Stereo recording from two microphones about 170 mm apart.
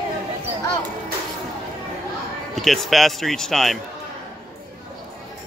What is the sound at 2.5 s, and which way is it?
Speech, centre (ahead or behind).